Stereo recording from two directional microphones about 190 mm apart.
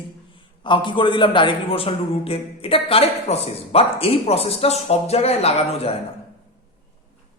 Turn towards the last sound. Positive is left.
turn(degrees=30)  # may be behind; listen again after turning